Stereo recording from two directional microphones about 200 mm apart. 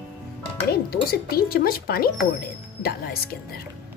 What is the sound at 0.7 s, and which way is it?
Speech, 50° left (ahead or behind).